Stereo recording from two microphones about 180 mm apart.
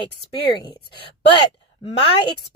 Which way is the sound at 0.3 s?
25° left (ahead or behind).